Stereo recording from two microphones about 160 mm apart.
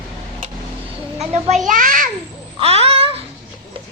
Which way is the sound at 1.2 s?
40° right (ahead or behind).